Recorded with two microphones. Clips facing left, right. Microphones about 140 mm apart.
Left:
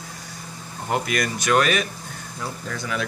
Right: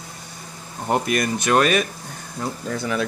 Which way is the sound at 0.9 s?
30° right (ahead or behind).